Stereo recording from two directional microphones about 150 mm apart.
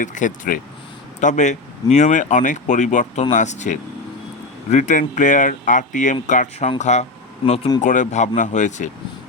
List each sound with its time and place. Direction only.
0.0 s speech: 55° left (ahead or behind)
7.8 s speech: 55° left (ahead or behind)